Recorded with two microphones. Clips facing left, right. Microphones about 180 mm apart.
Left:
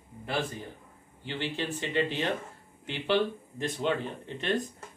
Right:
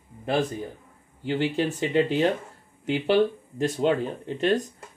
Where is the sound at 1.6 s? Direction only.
45° right (ahead or behind).